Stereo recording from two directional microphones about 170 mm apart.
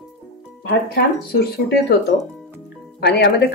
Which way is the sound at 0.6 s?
65° left (ahead or behind).